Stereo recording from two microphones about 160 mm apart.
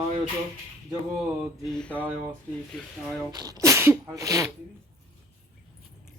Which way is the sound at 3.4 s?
20° right (ahead or behind).